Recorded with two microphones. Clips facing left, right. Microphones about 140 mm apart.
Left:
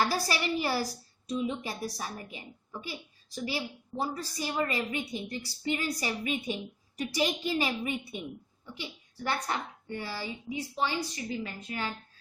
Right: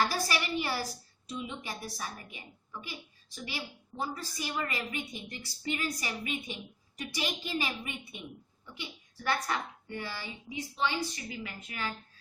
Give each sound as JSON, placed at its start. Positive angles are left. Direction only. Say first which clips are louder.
{"t": 0.1, "sound": "a woman's voice", "louder": "left 2 dB", "side_deg": 35}